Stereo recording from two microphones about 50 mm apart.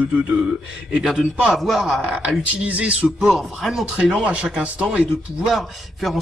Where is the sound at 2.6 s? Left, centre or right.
Right.